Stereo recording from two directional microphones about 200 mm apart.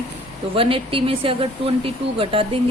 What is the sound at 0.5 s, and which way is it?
A woman's voice, 25° right (ahead or behind).